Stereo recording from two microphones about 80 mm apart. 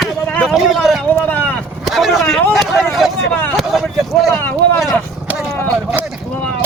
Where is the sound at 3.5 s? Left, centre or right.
Centre.